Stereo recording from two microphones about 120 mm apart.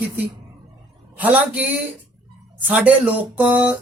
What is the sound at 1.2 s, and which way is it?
Speech, 15° right (ahead or behind).